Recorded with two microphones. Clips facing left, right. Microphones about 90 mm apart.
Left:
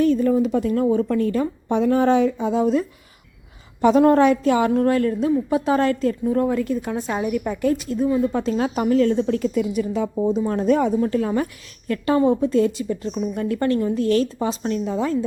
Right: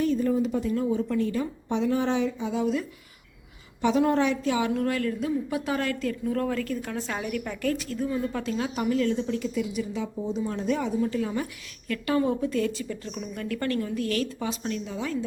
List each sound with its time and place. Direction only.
0.0 s a woman's voice: 70° left (ahead or behind); by 8.5 s 25° left (ahead or behind)
8.5 s a woman's voice: 40° left (ahead or behind)
11.9 s a woman's voice: 30° left (ahead or behind)